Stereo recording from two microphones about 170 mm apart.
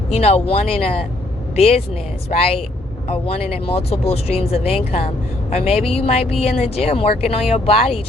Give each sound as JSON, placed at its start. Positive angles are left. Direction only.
{"t": 0.1, "sound": "speech", "side_deg": 35}